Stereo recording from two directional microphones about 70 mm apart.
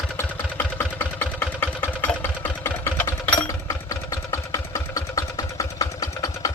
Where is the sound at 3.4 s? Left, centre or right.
Left.